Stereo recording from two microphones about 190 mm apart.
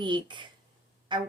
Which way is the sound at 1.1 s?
25° right (ahead or behind).